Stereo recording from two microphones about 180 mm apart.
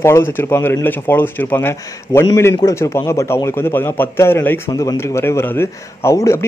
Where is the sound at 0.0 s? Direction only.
15° left (ahead or behind).